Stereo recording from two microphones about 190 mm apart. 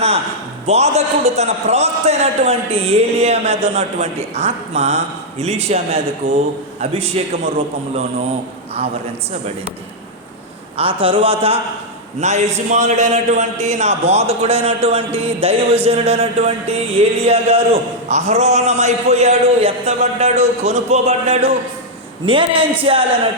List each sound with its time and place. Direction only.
0.7 s a man's voice: 35° right (ahead or behind)
10.8 s a man's voice: 30° right (ahead or behind)